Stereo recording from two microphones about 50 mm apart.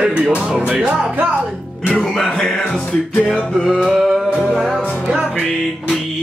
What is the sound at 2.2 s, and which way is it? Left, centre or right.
Speech, centre.